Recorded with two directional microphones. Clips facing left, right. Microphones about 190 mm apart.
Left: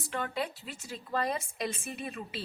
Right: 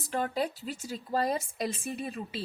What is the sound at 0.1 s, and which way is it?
A woman's voice, 40° right (ahead or behind).